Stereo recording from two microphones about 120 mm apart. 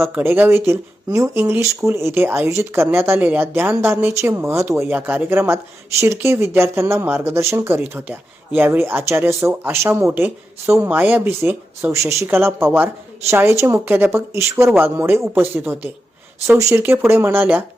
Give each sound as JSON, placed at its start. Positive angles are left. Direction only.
{"t": 0.0, "sound": "speech", "side_deg": -20}